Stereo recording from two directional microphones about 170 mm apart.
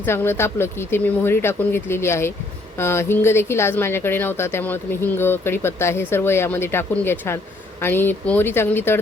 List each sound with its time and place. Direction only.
0.0 s speech: 15° left (ahead or behind)